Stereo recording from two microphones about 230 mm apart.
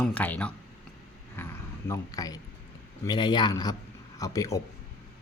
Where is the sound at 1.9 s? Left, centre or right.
Centre.